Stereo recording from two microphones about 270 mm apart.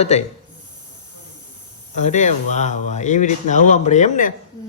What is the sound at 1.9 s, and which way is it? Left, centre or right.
Speech, left.